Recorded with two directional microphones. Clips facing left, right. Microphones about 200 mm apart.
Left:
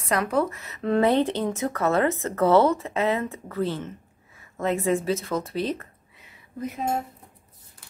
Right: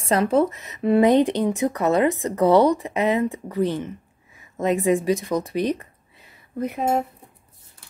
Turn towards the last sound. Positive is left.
turn(degrees=-60)  # may be behind; listen again after turning